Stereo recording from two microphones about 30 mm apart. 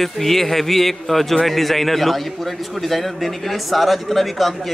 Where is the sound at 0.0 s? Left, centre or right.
Centre.